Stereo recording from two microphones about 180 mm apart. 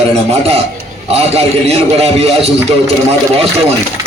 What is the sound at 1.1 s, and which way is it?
Music, 35° right (ahead or behind).